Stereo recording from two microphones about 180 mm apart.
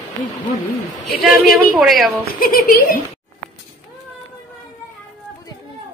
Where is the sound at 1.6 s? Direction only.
Centre (ahead or behind).